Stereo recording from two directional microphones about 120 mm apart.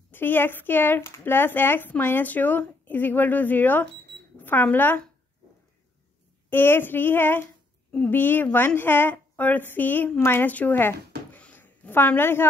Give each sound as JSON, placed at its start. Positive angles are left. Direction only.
{"t": 0.1, "sound": "speech", "side_deg": 15}
{"t": 6.5, "sound": "a woman's voice", "side_deg": 20}